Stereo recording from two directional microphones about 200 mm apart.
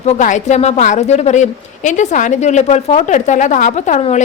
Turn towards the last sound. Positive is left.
turn(degrees=35)  # may be behind; listen again after turning